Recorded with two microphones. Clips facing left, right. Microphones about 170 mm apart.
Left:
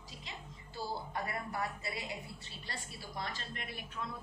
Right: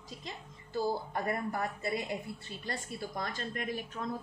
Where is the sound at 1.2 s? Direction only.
50° right (ahead or behind).